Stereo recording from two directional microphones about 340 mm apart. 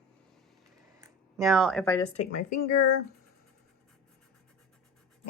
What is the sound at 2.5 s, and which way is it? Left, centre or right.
Speech, left.